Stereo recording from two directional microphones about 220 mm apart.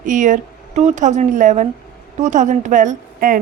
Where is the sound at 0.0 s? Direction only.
35° right (ahead or behind).